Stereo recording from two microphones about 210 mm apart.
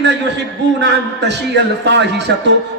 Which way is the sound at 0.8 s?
55° right (ahead or behind).